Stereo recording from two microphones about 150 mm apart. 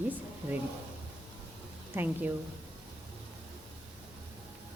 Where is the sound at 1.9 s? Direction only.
10° right (ahead or behind).